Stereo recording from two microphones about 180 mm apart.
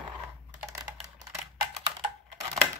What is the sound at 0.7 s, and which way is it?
Typing, 20° right (ahead or behind).